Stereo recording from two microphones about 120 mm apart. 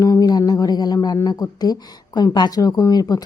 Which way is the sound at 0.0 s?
30° left (ahead or behind).